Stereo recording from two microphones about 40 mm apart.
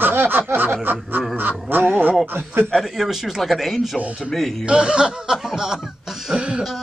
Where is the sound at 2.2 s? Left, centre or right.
Right.